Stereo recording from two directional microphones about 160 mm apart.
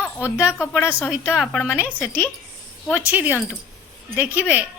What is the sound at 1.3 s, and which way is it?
Speech, centre (ahead or behind).